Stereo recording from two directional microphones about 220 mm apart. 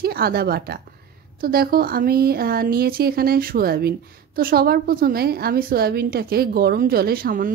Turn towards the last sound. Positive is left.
turn(degrees=-40)  # may be behind; listen again after turning